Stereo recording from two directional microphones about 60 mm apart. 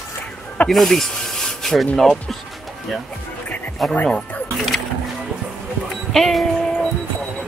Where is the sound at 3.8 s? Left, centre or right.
Centre.